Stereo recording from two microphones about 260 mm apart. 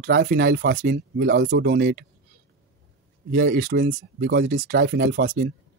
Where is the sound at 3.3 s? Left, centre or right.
Right.